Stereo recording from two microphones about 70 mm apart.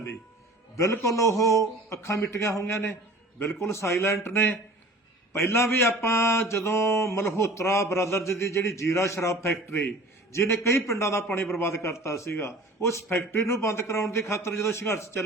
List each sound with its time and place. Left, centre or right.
0.8 s a man's voice: left
3.6 s mantra: left
8.7 s a man's voice: left
11.6 s mantra: left
13.3 s a man's voice: left